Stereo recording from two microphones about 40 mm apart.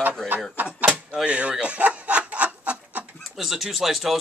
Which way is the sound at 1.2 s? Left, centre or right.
Right.